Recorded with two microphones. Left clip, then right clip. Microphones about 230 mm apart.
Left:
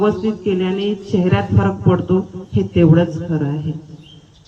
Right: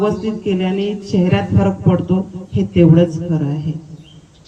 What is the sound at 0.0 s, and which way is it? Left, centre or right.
A woman's voice, centre.